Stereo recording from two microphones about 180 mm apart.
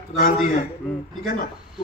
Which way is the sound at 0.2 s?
50° left (ahead or behind).